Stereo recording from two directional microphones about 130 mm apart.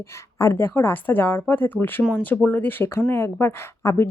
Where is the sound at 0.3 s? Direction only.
20° left (ahead or behind).